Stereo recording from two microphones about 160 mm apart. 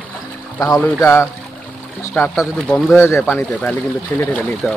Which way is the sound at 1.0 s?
15° left (ahead or behind).